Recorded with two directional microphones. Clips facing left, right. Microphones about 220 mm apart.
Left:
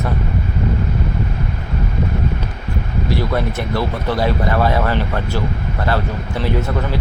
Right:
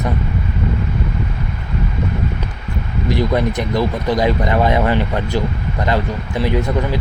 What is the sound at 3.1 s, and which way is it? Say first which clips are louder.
Speech: right 3 dB; 15° right (ahead or behind).